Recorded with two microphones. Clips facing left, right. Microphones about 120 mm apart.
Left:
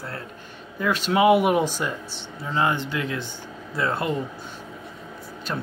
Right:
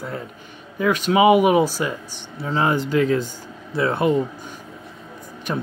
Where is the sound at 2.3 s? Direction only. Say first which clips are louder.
Right 3 dB; 40° right (ahead or behind).